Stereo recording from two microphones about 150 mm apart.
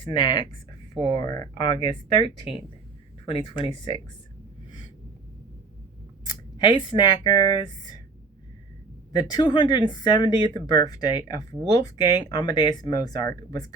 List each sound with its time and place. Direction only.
0.0 s speech: 30° left (ahead or behind)
6.2 s speech: 30° left (ahead or behind)
9.1 s speech: 30° left (ahead or behind)